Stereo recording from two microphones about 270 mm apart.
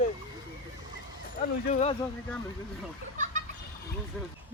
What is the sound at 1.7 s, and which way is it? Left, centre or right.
Speech, left.